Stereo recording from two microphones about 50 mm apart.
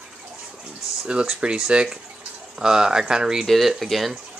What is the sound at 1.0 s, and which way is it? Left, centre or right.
Speech, centre.